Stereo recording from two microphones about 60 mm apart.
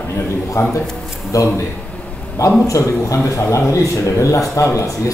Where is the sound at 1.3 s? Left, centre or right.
Left.